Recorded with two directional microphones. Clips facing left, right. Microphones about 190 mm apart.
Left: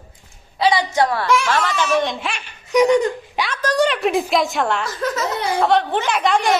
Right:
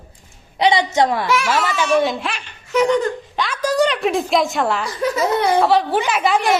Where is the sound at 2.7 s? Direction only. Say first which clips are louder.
Left 2 dB; 15° left (ahead or behind).